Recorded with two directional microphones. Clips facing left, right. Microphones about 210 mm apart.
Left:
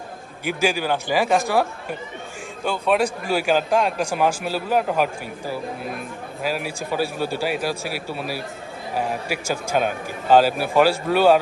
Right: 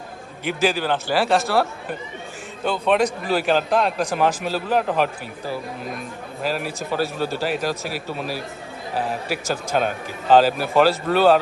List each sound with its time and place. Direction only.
0.4 s speech: 10° left (ahead or behind)
2.6 s speech: 10° left (ahead or behind)